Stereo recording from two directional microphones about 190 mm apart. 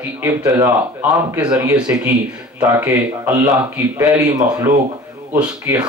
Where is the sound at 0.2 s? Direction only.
15° right (ahead or behind).